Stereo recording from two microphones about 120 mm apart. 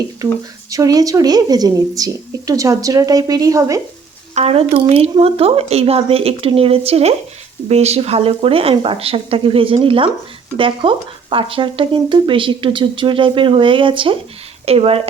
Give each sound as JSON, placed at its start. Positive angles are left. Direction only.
{"t": 0.2, "sound": "a woman's voice", "side_deg": -30}
{"t": 4.4, "sound": "a woman's voice", "side_deg": -55}